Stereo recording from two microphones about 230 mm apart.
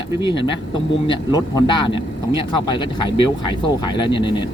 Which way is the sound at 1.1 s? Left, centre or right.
Centre.